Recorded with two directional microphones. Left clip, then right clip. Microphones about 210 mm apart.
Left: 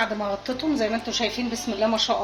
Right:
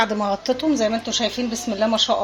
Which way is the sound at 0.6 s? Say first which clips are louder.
Right 4 dB; 40° right (ahead or behind).